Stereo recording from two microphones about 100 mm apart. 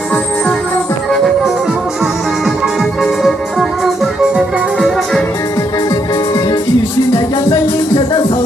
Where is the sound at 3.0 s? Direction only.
Centre (ahead or behind).